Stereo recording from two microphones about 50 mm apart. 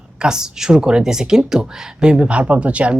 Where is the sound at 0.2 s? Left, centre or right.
Centre.